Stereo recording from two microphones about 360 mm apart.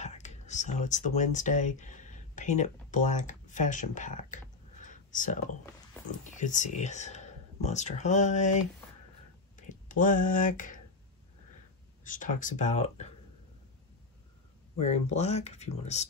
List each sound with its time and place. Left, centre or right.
0.0 s speech: centre
4.8 s a sound: left
6.3 s speech: left
9.6 s speech: left
12.0 s speech: left
14.8 s speech: centre